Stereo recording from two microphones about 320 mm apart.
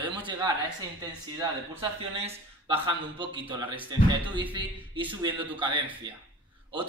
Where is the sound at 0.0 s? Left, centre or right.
Centre.